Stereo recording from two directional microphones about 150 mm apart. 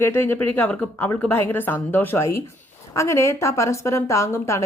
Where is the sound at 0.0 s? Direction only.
15° left (ahead or behind).